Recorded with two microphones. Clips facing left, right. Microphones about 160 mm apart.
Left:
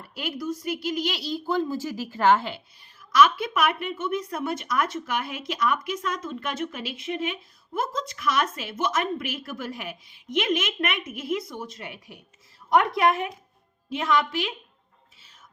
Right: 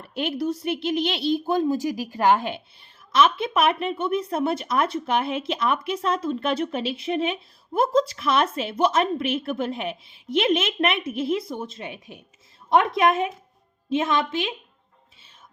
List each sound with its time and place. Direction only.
0.0 s speech: 25° right (ahead or behind)